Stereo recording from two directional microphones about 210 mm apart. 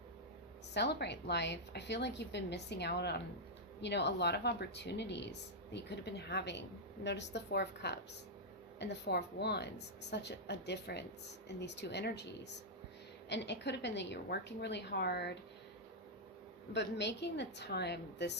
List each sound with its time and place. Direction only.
0.7 s a woman's voice: 55° left (ahead or behind)
16.7 s a woman's voice: 55° left (ahead or behind)